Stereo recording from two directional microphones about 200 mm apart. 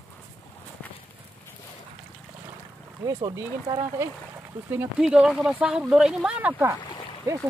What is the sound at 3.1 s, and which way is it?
Speech, 20° right (ahead or behind).